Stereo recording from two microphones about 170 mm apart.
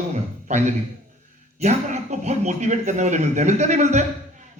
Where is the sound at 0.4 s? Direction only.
40° right (ahead or behind).